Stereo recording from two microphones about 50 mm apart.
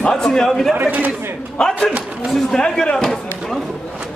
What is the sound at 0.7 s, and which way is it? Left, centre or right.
Speech, right.